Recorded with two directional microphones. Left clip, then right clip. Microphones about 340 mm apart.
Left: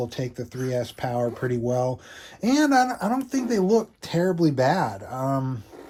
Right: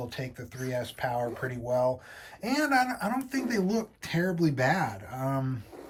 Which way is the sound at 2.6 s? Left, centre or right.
Centre.